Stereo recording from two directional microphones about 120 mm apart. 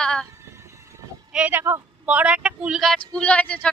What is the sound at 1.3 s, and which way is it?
Speech, 15° right (ahead or behind).